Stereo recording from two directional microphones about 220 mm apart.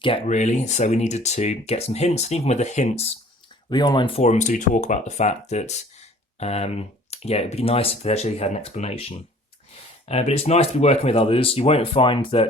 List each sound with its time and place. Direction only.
0.0 s speech: 30° left (ahead or behind)